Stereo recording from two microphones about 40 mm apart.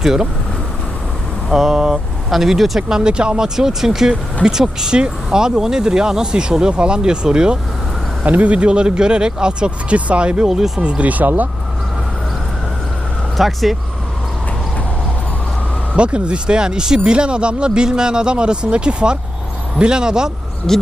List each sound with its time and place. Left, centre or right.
0.0 s speech: centre
1.5 s speech: centre
1.7 s speech: centre
2.3 s speech: centre
2.9 s speech: right
8.2 s speech: right
8.5 s speech: right
10.4 s speech: centre
10.8 s speech: right
11.1 s speech: right
13.3 s speech: centre
16.0 s speech: right
20.7 s speech: centre